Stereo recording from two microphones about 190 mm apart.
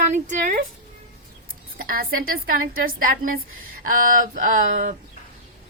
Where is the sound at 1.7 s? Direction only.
50° right (ahead or behind).